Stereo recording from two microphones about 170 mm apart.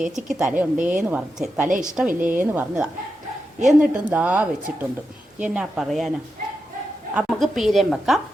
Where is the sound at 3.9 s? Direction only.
10° right (ahead or behind).